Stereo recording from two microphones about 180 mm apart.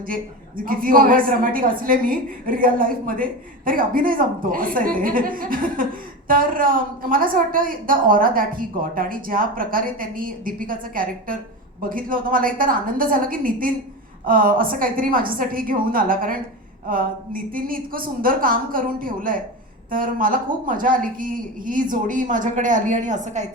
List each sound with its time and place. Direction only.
0.1 s a woman's voice: 50° right (ahead or behind)